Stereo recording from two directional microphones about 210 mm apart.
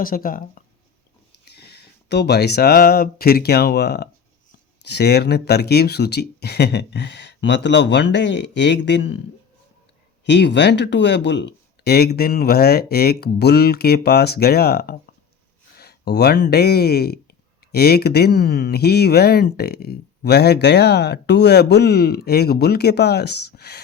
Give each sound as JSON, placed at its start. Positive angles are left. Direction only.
{"t": 0.0, "sound": "speech", "side_deg": 40}
{"t": 10.2, "sound": "speech", "side_deg": 55}